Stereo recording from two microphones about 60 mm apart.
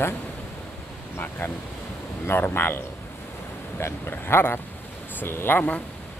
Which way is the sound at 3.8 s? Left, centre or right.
Left.